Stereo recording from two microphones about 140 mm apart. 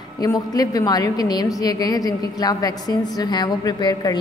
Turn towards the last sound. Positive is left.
turn(degrees=30)  # may be behind; listen again after turning